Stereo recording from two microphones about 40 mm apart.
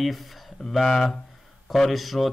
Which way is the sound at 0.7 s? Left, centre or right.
Centre.